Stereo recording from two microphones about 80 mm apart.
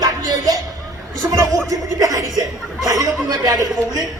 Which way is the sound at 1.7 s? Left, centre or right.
Right.